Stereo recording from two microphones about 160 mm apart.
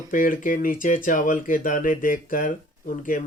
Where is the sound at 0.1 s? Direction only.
60° left (ahead or behind).